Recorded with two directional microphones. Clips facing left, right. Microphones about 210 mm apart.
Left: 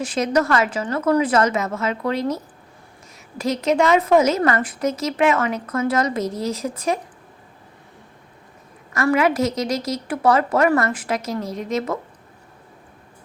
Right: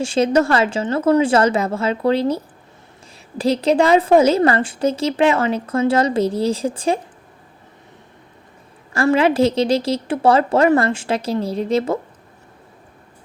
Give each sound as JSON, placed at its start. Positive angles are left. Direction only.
{"t": 0.0, "sound": "a woman's voice", "side_deg": -30}
{"t": 8.9, "sound": "a woman's voice", "side_deg": -30}